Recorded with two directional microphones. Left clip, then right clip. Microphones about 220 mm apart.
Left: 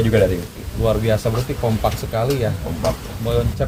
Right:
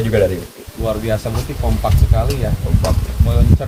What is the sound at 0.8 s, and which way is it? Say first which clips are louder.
Speech: left 1 dB; 45° left (ahead or behind).